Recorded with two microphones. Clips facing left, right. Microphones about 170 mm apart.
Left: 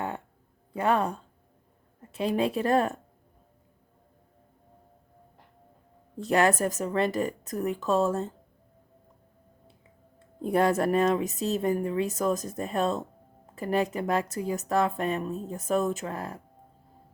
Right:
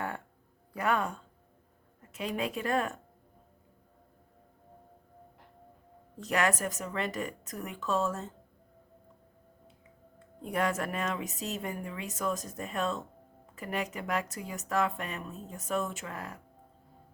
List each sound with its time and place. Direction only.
0.7 s speech: 30° left (ahead or behind)
6.1 s speech: 35° left (ahead or behind)
10.2 s speech: 35° left (ahead or behind)